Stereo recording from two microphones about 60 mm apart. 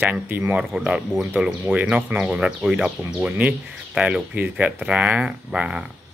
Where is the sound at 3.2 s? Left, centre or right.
Right.